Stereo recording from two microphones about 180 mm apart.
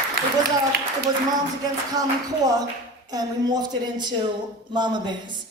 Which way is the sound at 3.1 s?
20° right (ahead or behind).